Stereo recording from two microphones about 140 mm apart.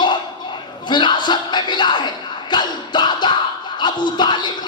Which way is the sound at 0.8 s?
35° left (ahead or behind).